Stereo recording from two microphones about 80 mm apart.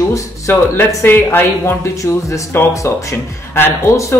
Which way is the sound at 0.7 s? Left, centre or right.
Left.